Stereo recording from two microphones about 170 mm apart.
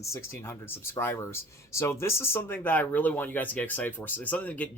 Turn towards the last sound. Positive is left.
turn(degrees=10)  # may be behind; listen again after turning